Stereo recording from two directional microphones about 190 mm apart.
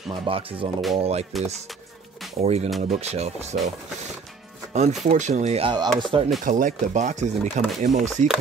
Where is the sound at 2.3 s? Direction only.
35° right (ahead or behind).